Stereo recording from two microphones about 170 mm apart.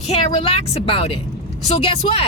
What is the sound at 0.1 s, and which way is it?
Speech, 35° left (ahead or behind).